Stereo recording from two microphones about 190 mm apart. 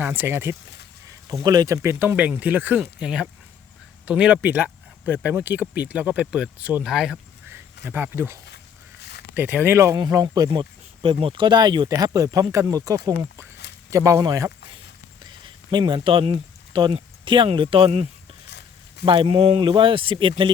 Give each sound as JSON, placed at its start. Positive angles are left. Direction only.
{"t": 0.0, "sound": "speech", "side_deg": -10}
{"t": 18.4, "sound": "a sound", "side_deg": 60}
{"t": 19.0, "sound": "speech", "side_deg": -25}